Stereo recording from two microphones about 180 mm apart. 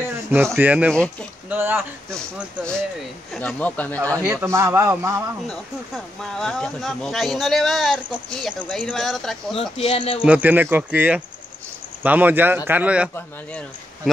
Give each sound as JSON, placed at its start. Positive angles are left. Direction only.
{"t": 0.6, "sound": "a man's voice", "side_deg": -10}
{"t": 3.3, "sound": "speech", "side_deg": 10}
{"t": 4.1, "sound": "a man's voice", "side_deg": -15}
{"t": 6.3, "sound": "speech", "side_deg": 5}
{"t": 9.6, "sound": "speech", "side_deg": 30}
{"t": 10.2, "sound": "a man's voice", "side_deg": -10}
{"t": 13.1, "sound": "speech", "side_deg": 5}